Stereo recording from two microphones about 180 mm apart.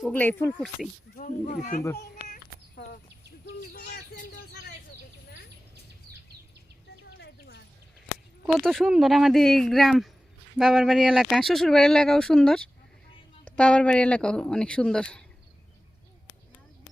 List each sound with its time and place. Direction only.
0.0 s speech: 10° left (ahead or behind)
1.1 s speech: 50° left (ahead or behind)
3.7 s bird: 55° left (ahead or behind)
7.2 s a sound: 70° left (ahead or behind)
8.4 s speech: centre (ahead or behind)